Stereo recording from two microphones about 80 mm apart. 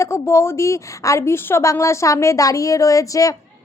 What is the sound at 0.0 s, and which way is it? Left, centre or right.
A woman's voice, left.